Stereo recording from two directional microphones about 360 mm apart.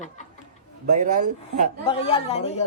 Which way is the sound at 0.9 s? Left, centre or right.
Centre.